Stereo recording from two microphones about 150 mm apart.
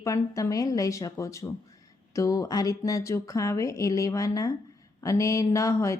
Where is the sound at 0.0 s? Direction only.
20° left (ahead or behind).